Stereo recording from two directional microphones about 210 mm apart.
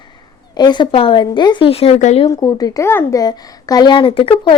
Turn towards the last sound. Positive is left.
turn(degrees=25)  # may be behind; listen again after turning